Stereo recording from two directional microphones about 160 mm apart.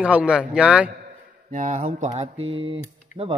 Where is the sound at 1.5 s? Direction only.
50° right (ahead or behind); by 3.3 s 35° right (ahead or behind).